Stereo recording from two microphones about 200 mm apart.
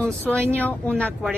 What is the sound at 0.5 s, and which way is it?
Speech, 5° left (ahead or behind).